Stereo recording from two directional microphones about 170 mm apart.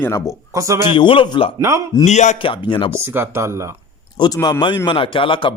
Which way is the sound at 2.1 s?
40° left (ahead or behind).